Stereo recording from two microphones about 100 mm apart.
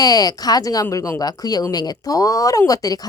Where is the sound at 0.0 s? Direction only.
40° left (ahead or behind).